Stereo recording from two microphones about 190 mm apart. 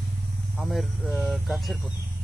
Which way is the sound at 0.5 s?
Centre (ahead or behind).